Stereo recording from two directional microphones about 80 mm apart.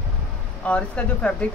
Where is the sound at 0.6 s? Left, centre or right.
Centre.